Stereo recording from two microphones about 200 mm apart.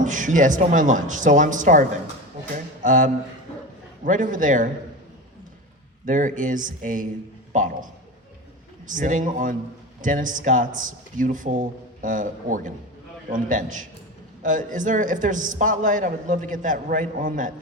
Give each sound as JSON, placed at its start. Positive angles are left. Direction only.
{"t": 0.0, "sound": "a man's voice", "side_deg": -40}
{"t": 2.8, "sound": "a man's voice", "side_deg": -40}
{"t": 6.1, "sound": "a man's voice", "side_deg": -40}
{"t": 8.9, "sound": "a man's voice", "side_deg": -40}